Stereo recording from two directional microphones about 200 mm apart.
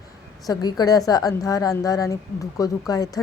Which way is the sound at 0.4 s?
20° left (ahead or behind).